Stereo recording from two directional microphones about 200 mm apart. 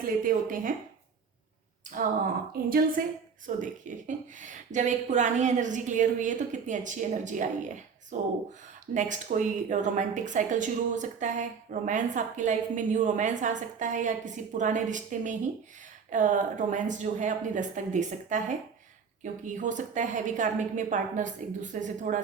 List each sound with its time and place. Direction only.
0.0 s a woman's voice: 45° right (ahead or behind)
2.6 s a woman's voice: 45° right (ahead or behind)